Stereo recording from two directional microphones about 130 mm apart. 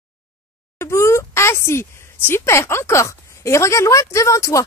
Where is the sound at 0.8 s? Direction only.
20° left (ahead or behind).